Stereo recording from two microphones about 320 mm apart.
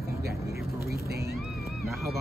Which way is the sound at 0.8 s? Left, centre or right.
Right.